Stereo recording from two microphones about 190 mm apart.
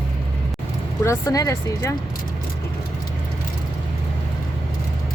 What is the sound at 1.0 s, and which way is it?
Speech, 15° left (ahead or behind).